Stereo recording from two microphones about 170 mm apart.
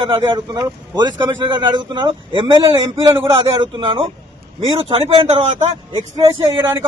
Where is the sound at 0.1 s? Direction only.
25° right (ahead or behind).